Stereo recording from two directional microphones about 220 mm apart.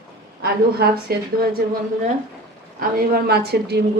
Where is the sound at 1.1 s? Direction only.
45° right (ahead or behind).